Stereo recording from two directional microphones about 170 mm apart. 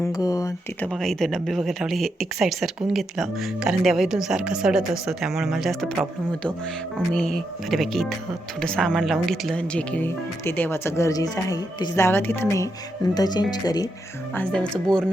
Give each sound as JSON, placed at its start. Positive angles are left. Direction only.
{"t": 0.0, "sound": "speech", "side_deg": 20}
{"t": 0.8, "sound": "speech", "side_deg": 0}
{"t": 7.7, "sound": "speech", "side_deg": 0}
{"t": 14.3, "sound": "speech", "side_deg": 5}